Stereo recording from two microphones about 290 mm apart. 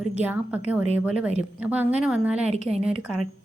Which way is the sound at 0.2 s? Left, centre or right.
Centre.